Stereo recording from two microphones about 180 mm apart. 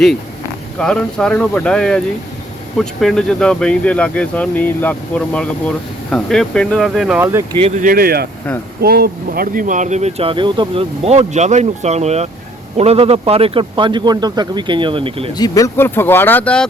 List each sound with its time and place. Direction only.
0.8 s speech: 5° left (ahead or behind)
7.2 s speech: 10° right (ahead or behind)
7.8 s speech: 50° right (ahead or behind); by 15.3 s 30° right (ahead or behind)
15.4 s speech: 20° left (ahead or behind)